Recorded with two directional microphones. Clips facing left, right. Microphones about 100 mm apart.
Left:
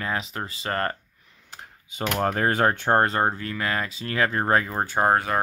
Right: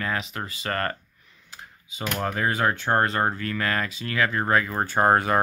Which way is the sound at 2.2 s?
45° left (ahead or behind).